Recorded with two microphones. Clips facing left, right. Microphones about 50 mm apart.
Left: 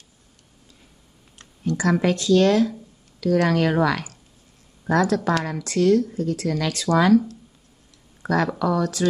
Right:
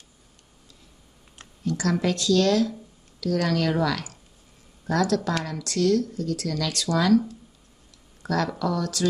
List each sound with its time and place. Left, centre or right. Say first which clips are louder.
1.6 s speech: left 4 dB; left
8.2 s a sound: left 4 dB; left
8.5 s speech: left 4 dB; left